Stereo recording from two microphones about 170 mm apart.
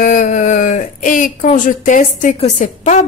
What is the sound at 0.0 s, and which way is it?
A woman's voice, 50° left (ahead or behind).